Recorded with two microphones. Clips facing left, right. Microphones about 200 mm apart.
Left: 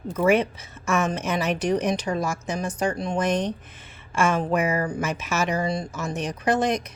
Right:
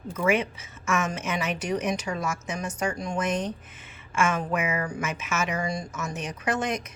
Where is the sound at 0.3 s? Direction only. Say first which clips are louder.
Left 5 dB; 35° left (ahead or behind).